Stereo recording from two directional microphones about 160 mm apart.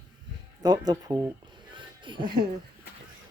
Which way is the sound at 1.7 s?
30° right (ahead or behind).